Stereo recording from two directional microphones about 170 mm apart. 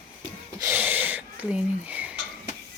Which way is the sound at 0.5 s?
15° right (ahead or behind).